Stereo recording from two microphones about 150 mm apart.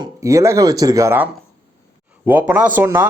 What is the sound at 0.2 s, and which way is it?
Speech, 20° right (ahead or behind).